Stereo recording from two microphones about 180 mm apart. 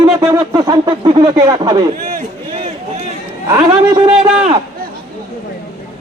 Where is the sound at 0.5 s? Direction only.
25° right (ahead or behind).